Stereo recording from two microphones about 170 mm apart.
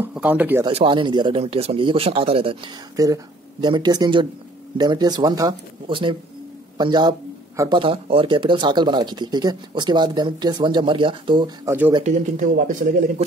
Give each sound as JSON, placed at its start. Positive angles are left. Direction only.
{"t": 0.0, "sound": "speech", "side_deg": -10}
{"t": 0.7, "sound": "speech", "side_deg": -30}
{"t": 3.0, "sound": "a man's voice", "side_deg": -20}
{"t": 7.8, "sound": "speech", "side_deg": -30}
{"t": 12.0, "sound": "speech", "side_deg": -45}